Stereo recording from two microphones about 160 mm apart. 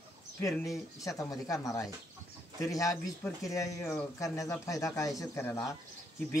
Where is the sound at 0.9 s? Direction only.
20° left (ahead or behind).